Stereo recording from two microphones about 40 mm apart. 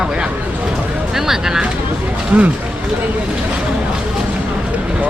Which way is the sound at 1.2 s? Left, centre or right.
Centre.